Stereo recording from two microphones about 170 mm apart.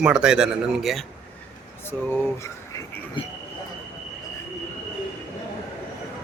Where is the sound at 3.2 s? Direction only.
30° left (ahead or behind).